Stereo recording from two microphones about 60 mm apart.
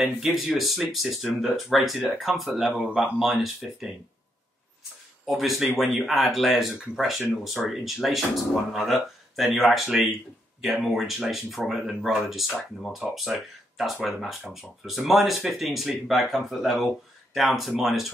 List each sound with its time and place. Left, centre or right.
0.0 s speech: centre
2.8 s speech: centre
3.2 s speech: centre
5.2 s speech: centre